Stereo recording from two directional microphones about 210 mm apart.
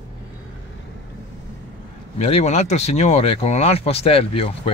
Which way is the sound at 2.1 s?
30° left (ahead or behind).